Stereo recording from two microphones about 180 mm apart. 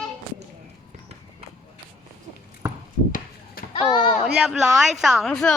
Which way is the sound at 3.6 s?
55° left (ahead or behind).